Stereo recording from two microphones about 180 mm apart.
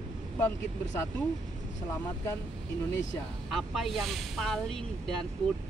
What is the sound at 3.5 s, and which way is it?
Speech, centre (ahead or behind).